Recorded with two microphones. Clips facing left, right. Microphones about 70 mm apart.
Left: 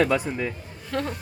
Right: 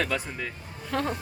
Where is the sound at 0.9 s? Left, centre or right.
Centre.